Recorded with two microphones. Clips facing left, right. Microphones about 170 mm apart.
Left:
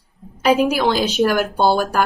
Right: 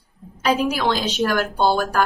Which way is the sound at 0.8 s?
15° left (ahead or behind).